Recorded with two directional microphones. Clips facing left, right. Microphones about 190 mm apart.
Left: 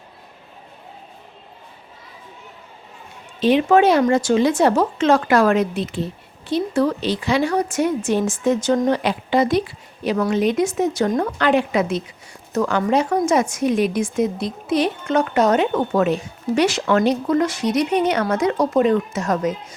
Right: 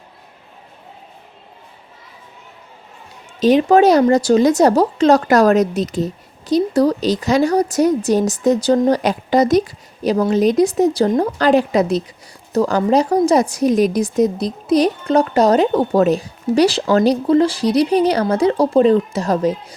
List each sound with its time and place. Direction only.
3.4 s a woman's voice: 40° right (ahead or behind)